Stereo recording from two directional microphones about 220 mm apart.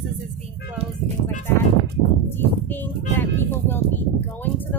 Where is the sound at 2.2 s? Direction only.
10° left (ahead or behind).